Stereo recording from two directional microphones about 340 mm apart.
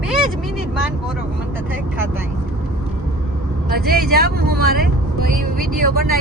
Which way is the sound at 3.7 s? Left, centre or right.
Right.